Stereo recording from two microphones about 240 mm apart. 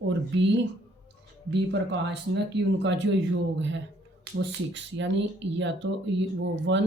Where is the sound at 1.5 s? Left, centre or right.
Right.